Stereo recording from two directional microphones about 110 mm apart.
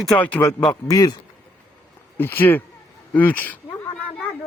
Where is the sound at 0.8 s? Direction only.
35° left (ahead or behind).